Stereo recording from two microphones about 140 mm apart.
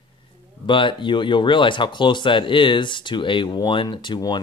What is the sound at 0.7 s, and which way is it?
Speech, 35° left (ahead or behind).